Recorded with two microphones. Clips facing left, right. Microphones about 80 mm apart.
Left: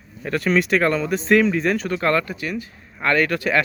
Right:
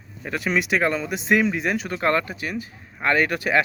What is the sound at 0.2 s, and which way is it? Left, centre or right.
Speech, centre.